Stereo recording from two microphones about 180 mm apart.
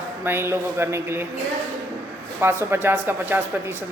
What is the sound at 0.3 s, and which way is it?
Speech, 15° right (ahead or behind).